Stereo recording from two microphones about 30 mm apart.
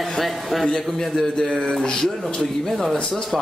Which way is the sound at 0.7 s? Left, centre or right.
Centre.